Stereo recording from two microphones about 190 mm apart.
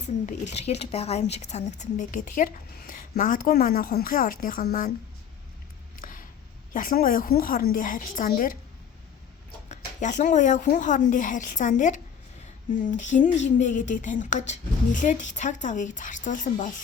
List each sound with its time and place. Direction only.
0.3 s speech: 35° left (ahead or behind)
6.0 s a sound: 45° left (ahead or behind)
6.7 s speech: 50° left (ahead or behind)
9.6 s speech: 40° left (ahead or behind)